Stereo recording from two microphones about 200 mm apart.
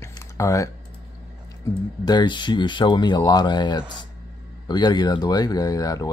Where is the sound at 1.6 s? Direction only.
15° left (ahead or behind).